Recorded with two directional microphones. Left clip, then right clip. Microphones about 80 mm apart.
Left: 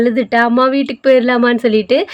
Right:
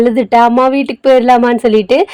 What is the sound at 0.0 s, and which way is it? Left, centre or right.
Speech, right.